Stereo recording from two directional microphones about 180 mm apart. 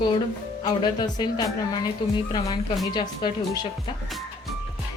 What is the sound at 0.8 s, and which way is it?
Speech, 25° left (ahead or behind).